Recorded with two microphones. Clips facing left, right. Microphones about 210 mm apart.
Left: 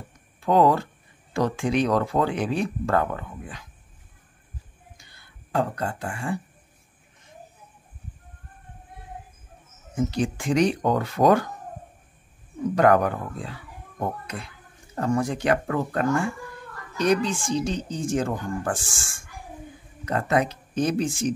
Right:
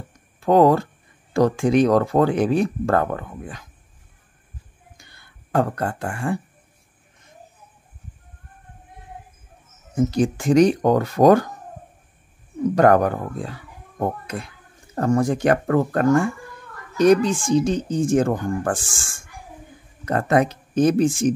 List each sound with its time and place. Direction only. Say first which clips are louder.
0.4 s speech: right 4 dB; 45° right (ahead or behind)
4.9 s a sound: right 2 dB; 55° right (ahead or behind)
9.9 s speech: right 5 dB; 45° right (ahead or behind)
12.7 s a child's voice: right 3 dB; 45° right (ahead or behind)
20.1 s speech: right 4 dB; 50° right (ahead or behind)